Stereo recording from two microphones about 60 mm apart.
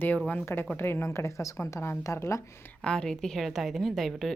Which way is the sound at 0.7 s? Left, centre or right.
Left.